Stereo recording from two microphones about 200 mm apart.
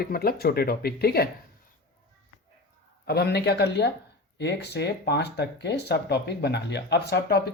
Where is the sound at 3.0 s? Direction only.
55° left (ahead or behind).